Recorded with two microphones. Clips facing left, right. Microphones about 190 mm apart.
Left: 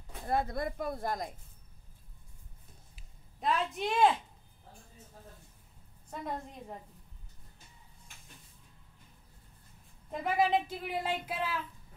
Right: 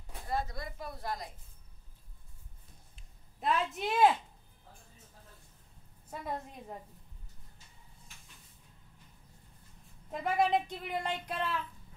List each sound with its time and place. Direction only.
0.3 s speech: 55° left (ahead or behind)
3.0 s a sound: centre (ahead or behind)
6.0 s speech: 5° right (ahead or behind)
10.1 s speech: centre (ahead or behind)